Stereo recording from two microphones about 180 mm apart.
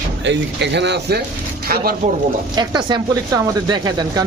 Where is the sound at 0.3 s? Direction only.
75° right (ahead or behind); by 2.0 s 60° right (ahead or behind).